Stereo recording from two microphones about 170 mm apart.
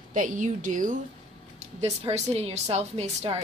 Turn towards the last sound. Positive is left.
turn(degrees=-40)  # may be behind; listen again after turning